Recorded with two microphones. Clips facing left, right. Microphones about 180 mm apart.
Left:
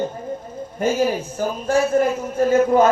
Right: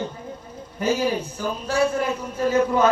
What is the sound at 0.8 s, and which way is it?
Speech, 50° left (ahead or behind).